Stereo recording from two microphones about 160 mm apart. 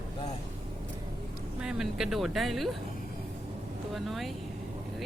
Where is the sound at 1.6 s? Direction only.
5° right (ahead or behind).